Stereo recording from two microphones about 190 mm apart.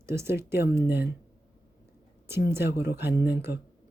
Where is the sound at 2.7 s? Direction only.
60° left (ahead or behind).